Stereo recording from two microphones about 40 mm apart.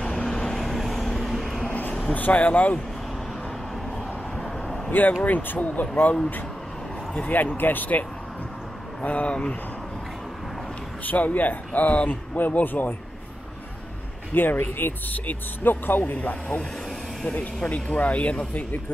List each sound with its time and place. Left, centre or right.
0.0 s vehicle: centre
0.6 s vehicle: centre
1.7 s a sound: left
2.1 s speech: left
4.5 s vehicle: centre
5.2 s speech: left
7.2 s speech: left
9.0 s speech: left
11.1 s speech: left
14.3 s speech: left
17.6 s speech: left